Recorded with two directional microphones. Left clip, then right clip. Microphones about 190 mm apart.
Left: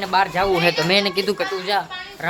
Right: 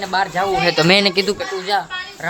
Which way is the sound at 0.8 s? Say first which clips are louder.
Right 5 dB; 20° right (ahead or behind).